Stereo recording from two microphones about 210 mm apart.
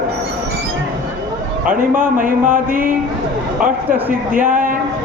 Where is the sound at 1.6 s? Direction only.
40° right (ahead or behind).